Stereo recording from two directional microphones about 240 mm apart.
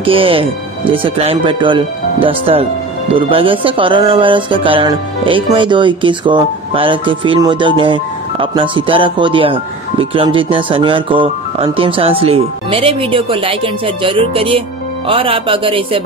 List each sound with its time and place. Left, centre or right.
0.0 s speech: right